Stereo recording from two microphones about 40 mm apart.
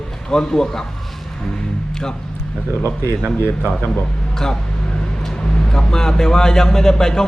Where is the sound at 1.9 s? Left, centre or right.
Centre.